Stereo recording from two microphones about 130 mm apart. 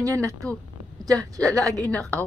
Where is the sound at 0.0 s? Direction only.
25° right (ahead or behind).